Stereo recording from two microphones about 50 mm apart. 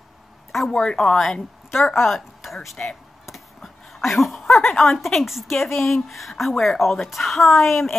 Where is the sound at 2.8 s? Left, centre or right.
Left.